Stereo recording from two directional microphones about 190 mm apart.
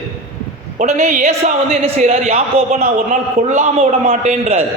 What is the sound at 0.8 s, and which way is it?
Speech, 40° right (ahead or behind).